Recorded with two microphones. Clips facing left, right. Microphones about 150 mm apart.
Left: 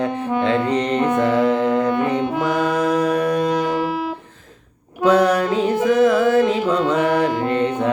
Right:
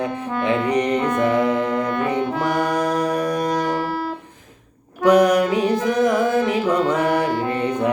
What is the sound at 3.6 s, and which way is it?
Music, 15° left (ahead or behind).